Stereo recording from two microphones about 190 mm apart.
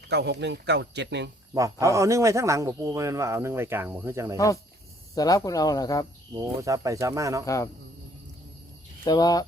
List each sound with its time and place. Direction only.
0.1 s speech: 60° right (ahead or behind)
1.5 s a man's voice: 15° right (ahead or behind)
4.4 s speech: 15° left (ahead or behind)
6.3 s a man's voice: 15° right (ahead or behind)
7.4 s speech: 15° left (ahead or behind)
9.0 s speech: 20° left (ahead or behind)